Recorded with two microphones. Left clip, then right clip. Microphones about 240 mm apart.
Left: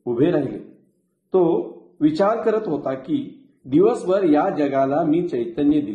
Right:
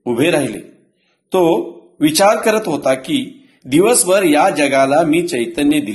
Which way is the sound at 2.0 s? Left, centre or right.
Right.